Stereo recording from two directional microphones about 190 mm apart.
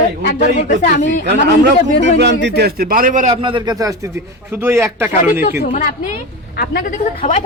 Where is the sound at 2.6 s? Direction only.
50° right (ahead or behind).